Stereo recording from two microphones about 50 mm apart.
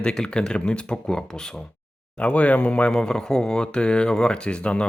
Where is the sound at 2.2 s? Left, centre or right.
Left.